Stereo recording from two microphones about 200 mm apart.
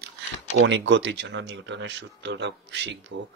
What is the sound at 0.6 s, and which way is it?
Speech, 65° right (ahead or behind).